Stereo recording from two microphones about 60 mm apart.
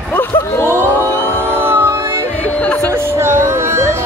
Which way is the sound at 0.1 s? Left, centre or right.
Left.